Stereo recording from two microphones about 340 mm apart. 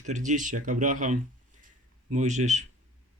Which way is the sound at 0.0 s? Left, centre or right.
Right.